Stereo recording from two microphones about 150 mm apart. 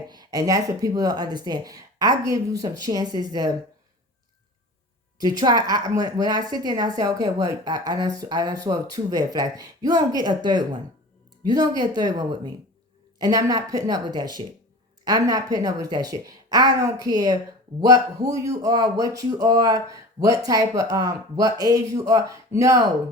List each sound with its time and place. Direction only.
0.1 s a woman's voice: 25° right (ahead or behind)
5.2 s a woman's voice: 25° right (ahead or behind)